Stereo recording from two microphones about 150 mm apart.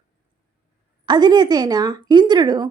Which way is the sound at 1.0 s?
30° right (ahead or behind).